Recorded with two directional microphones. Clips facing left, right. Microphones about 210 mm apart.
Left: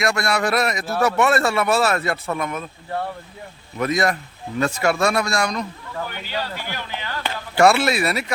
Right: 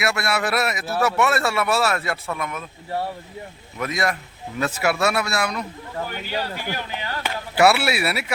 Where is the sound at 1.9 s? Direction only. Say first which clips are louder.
Left 3 dB; 45° left (ahead or behind).